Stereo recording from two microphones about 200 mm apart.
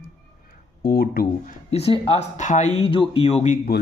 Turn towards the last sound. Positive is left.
turn(degrees=40)  # may be behind; listen again after turning